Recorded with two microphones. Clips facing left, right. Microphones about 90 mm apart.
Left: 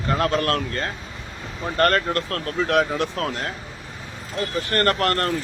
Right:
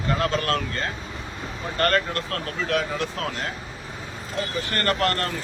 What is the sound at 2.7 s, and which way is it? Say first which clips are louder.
Speech: left 5 dB; 60° left (ahead or behind).